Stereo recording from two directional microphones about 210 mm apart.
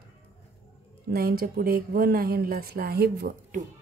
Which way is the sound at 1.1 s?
45° right (ahead or behind).